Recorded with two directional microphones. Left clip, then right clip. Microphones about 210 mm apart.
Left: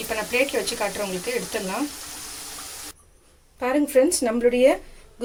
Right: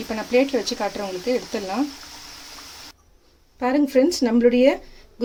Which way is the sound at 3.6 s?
50° right (ahead or behind).